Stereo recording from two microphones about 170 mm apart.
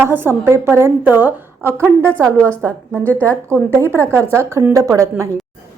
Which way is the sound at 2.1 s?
5° left (ahead or behind).